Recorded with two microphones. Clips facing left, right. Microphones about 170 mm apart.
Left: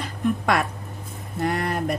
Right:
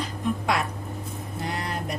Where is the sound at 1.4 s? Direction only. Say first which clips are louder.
Left 8 dB; 55° left (ahead or behind).